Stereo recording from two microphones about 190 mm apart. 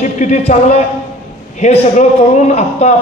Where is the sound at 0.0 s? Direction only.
40° left (ahead or behind).